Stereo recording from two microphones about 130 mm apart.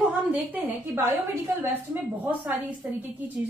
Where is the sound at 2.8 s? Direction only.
10° right (ahead or behind).